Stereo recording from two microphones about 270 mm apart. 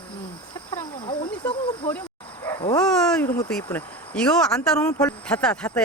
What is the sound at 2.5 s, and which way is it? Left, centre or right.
Speech, centre.